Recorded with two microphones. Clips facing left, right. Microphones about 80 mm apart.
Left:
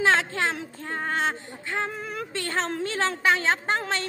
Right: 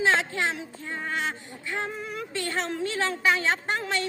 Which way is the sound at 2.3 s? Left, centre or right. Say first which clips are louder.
Left 1 dB; left.